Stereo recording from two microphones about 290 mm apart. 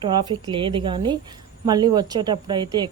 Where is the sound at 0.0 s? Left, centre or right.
Centre.